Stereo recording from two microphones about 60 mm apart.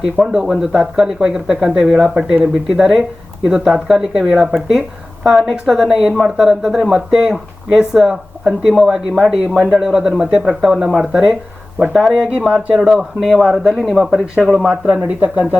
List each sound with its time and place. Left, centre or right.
0.0 s a woman's voice: centre; by 15.5 s right